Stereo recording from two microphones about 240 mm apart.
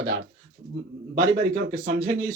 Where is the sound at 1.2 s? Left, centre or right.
Right.